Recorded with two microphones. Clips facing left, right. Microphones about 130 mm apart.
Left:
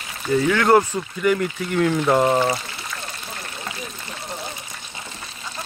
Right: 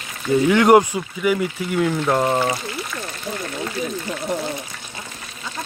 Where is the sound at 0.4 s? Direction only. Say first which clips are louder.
Right 4 dB; 15° right (ahead or behind); by 2.4 s centre (ahead or behind).